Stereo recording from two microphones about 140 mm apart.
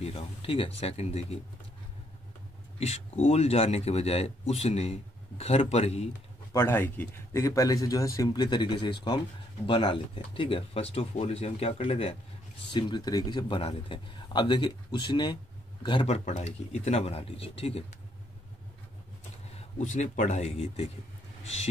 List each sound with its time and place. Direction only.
0.0 s speech: 40° left (ahead or behind)
2.8 s speech: 50° left (ahead or behind)
6.5 s a man's voice: 15° left (ahead or behind); by 12.2 s 45° left (ahead or behind)
12.7 s speech: 30° left (ahead or behind)
16.1 s speech: 50° left (ahead or behind)
19.4 s speech: 55° left (ahead or behind)